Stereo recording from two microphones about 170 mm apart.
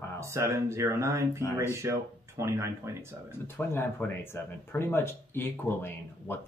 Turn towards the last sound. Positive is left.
turn(degrees=15)  # may be behind; listen again after turning